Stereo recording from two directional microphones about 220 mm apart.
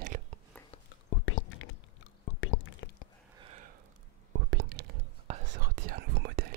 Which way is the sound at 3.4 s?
30° right (ahead or behind).